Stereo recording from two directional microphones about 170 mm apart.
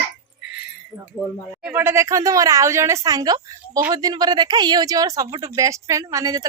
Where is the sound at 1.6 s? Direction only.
15° right (ahead or behind).